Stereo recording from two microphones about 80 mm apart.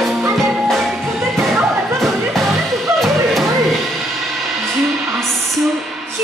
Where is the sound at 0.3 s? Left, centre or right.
Centre.